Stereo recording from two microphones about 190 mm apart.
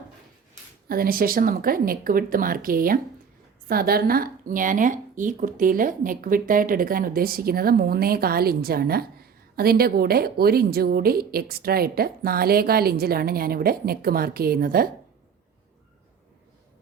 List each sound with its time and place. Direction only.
0.9 s speech: 50° right (ahead or behind)